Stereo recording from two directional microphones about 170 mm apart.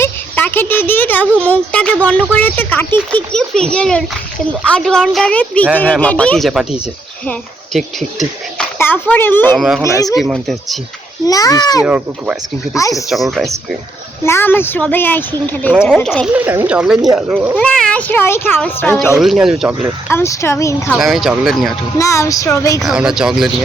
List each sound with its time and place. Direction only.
0.0 s a woman's voice: 10° left (ahead or behind)
9.6 s a woman's voice: centre (ahead or behind)
9.8 s a sound: 20° left (ahead or behind)
10.2 s a woman's voice: centre (ahead or behind)
11.3 s a sound: 20° left (ahead or behind)
11.8 s a woman's voice: 10° right (ahead or behind)
14.3 s a woman's voice: 15° left (ahead or behind); by 16.4 s centre (ahead or behind)
16.4 s speech: 10° right (ahead or behind)
17.6 s speech: 5° left (ahead or behind)
19.2 s a woman's voice: centre (ahead or behind)
20.1 s speech: 15° left (ahead or behind)
20.9 s a woman's voice: centre (ahead or behind)
21.9 s a sound: 20° left (ahead or behind)
22.8 s a woman's voice: 5° right (ahead or behind)